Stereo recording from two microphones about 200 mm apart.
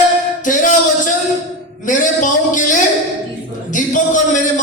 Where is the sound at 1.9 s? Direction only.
40° left (ahead or behind).